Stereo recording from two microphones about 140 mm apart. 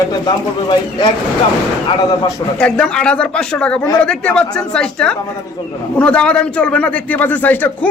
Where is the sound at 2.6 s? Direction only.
5° left (ahead or behind).